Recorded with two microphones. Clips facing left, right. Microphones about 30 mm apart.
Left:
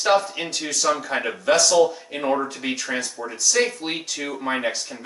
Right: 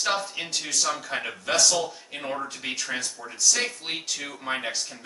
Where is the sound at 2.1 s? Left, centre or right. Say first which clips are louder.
Left 8 dB; centre.